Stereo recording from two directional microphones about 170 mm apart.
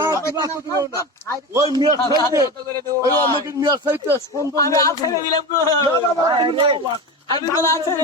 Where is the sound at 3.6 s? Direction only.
15° right (ahead or behind).